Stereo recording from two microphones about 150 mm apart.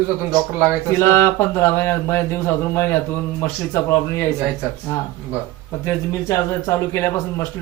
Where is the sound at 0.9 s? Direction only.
15° left (ahead or behind).